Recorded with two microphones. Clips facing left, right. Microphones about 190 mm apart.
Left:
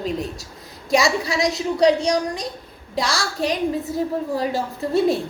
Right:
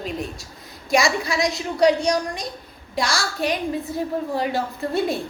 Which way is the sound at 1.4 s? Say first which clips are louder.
Left 1 dB; 35° left (ahead or behind).